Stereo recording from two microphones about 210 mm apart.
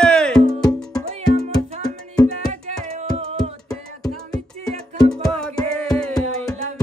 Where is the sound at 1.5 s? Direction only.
20° left (ahead or behind).